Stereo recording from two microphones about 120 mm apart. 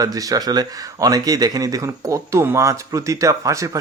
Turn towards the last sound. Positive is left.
turn(degrees=-25)  # may be behind; listen again after turning